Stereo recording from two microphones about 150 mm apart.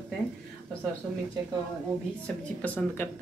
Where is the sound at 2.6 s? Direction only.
15° left (ahead or behind).